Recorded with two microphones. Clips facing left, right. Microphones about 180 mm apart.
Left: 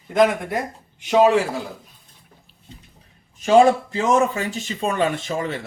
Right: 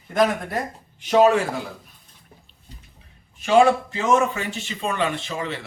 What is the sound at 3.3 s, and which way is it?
Speech, 40° left (ahead or behind).